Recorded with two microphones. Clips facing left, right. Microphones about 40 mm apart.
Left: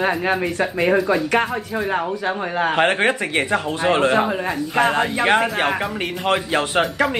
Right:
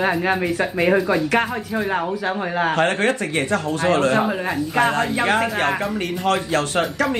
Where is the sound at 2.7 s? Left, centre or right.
Left.